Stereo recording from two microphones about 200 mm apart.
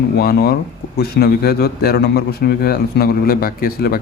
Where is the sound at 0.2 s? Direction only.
50° left (ahead or behind).